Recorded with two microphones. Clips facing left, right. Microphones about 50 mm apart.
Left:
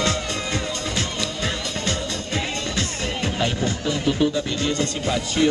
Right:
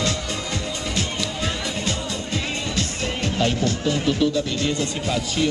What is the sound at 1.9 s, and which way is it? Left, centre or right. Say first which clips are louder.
Music: even; left.